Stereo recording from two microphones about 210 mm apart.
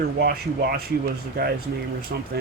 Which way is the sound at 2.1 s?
50° right (ahead or behind).